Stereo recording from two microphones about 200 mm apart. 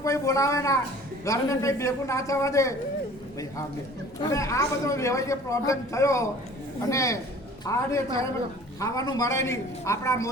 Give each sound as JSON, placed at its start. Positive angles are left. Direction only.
{"t": 0.0, "sound": "a man's voice", "side_deg": 15}
{"t": 4.2, "sound": "a man's voice", "side_deg": 15}